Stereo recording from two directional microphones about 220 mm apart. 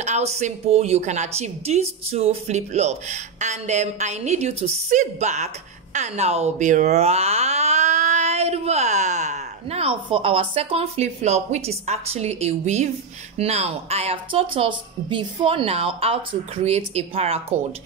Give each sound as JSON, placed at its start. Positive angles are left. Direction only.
{"t": 0.0, "sound": "a woman's voice", "side_deg": -30}